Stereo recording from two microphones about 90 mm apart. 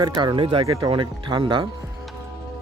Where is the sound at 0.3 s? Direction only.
90° right.